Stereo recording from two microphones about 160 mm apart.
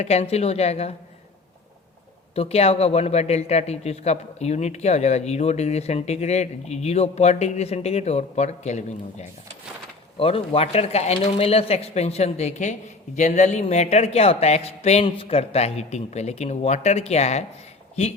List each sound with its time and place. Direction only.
0.0 s speech: 45° left (ahead or behind)
2.3 s speech: 40° left (ahead or behind)